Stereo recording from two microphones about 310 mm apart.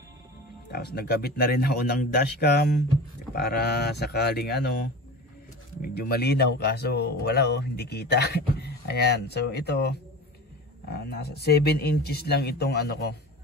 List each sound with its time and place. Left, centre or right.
0.7 s speech: left
5.8 s speech: left